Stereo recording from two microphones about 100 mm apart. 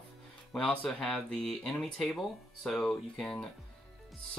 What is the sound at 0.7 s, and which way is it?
Speech, 10° left (ahead or behind).